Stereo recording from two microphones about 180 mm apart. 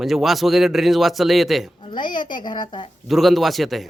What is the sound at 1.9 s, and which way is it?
Speech, 25° left (ahead or behind).